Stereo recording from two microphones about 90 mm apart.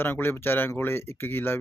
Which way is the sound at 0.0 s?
25° left (ahead or behind).